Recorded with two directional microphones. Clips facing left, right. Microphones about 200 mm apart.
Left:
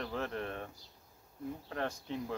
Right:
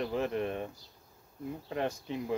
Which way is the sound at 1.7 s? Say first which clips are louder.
Right 5 dB; 15° right (ahead or behind).